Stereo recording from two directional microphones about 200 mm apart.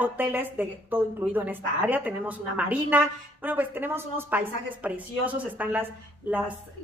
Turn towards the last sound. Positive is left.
turn(degrees=-10)  # may be behind; listen again after turning